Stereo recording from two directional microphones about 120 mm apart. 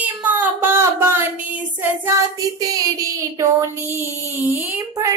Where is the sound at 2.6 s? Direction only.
30° right (ahead or behind).